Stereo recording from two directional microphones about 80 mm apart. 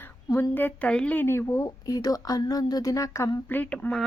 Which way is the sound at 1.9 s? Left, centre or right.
Left.